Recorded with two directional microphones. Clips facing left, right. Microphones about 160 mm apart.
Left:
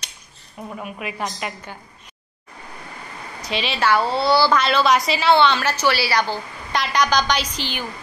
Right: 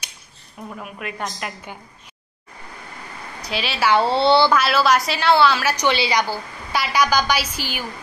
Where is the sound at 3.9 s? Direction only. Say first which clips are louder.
Right 3 dB; 30° right (ahead or behind).